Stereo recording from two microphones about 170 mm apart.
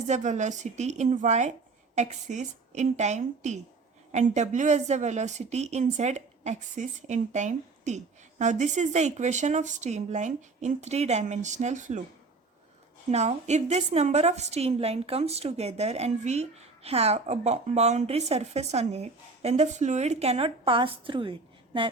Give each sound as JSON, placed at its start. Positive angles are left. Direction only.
{"t": 0.1, "sound": "a woman's voice", "side_deg": -45}
{"t": 13.1, "sound": "a woman's voice", "side_deg": -40}